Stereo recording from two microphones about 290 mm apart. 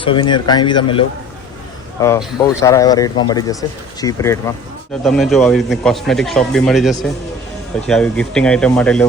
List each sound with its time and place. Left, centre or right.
0.0 s speech: centre